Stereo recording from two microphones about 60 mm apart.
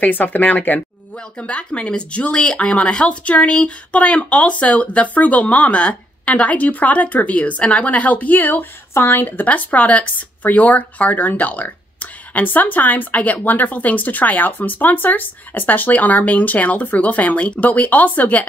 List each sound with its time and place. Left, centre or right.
0.0 s speech: left